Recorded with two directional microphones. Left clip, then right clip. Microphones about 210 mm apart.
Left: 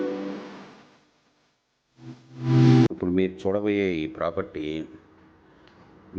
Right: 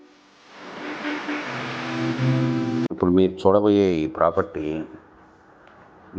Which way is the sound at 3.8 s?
Centre (ahead or behind).